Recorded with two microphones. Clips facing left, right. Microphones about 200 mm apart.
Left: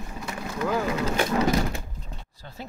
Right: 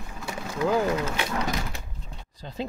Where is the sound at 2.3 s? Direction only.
20° right (ahead or behind).